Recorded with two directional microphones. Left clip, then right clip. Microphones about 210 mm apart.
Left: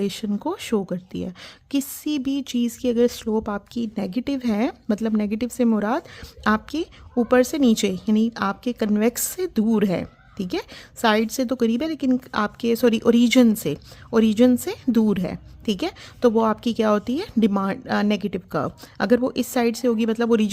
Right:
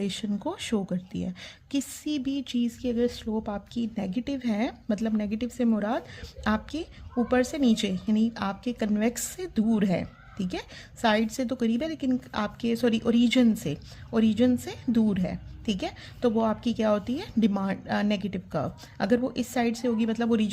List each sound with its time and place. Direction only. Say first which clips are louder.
0.0 s speech: left 5 dB; 30° left (ahead or behind)